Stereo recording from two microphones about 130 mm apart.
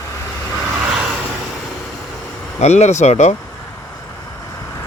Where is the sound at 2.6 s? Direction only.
60° left (ahead or behind).